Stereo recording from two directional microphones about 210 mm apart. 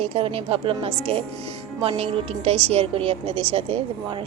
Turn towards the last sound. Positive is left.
turn(degrees=-30)  # may be behind; listen again after turning